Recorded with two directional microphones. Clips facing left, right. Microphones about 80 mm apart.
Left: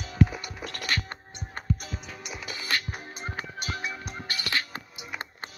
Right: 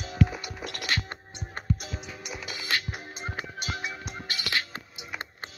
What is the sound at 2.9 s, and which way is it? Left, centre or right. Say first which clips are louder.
Music: even; centre.